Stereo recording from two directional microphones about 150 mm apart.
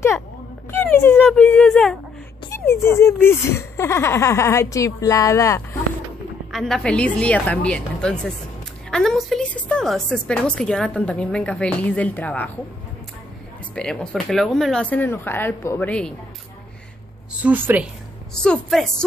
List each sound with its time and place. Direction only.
0.7 s speech: 15° left (ahead or behind)
2.5 s speech: 15° left (ahead or behind)
6.5 s a woman's voice: centre (ahead or behind)
13.7 s a woman's voice: 5° left (ahead or behind)
17.4 s a woman's voice: 10° right (ahead or behind)
18.3 s a woman's voice: 5° left (ahead or behind)